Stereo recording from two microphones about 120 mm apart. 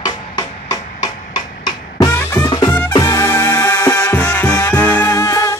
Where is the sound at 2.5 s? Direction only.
40° left (ahead or behind).